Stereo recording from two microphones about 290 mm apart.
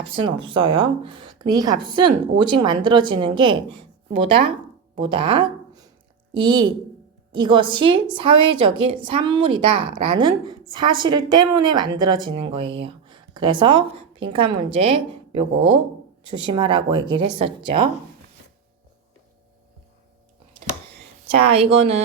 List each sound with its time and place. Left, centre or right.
0.0 s a woman's voice: centre
21.2 s speech: centre